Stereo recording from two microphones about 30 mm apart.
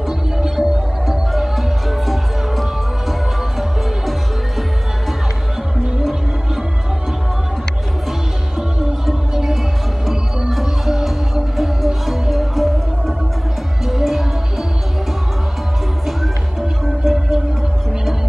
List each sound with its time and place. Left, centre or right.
0.6 s music: centre
8.5 s music: centre
10.6 s music: centre
11.5 s music: centre
17.0 s music: centre